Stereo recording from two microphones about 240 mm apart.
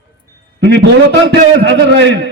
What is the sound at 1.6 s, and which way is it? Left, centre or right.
Speech, right.